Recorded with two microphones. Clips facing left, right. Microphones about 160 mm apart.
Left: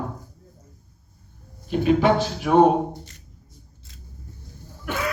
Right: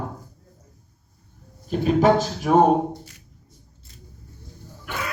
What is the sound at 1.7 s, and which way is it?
Speech, 40° right (ahead or behind).